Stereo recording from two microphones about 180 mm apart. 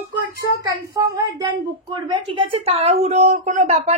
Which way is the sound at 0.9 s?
20° right (ahead or behind).